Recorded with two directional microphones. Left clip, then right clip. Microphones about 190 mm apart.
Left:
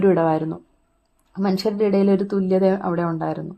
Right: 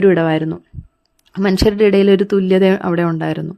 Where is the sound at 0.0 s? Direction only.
20° right (ahead or behind).